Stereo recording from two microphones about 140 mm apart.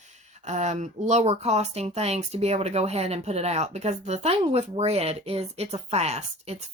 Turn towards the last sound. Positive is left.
turn(degrees=-50)  # may be behind; listen again after turning